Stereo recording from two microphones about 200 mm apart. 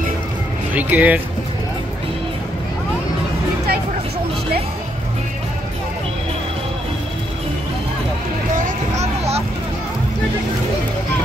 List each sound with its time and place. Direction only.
0.7 s speech: 10° right (ahead or behind)
8.9 s vehicle: 30° right (ahead or behind)